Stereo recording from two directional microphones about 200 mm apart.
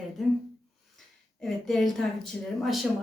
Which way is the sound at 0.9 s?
Centre (ahead or behind).